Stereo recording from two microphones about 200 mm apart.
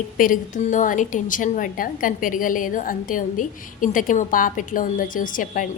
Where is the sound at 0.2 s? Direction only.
40° left (ahead or behind).